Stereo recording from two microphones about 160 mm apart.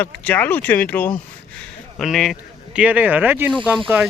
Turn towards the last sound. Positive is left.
turn(degrees=0)  # may be behind; listen again after turning